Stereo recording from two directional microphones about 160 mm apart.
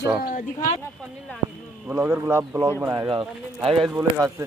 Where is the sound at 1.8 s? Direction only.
10° right (ahead or behind).